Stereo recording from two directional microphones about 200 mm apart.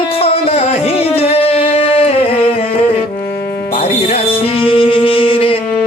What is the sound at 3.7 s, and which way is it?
Music, 30° left (ahead or behind).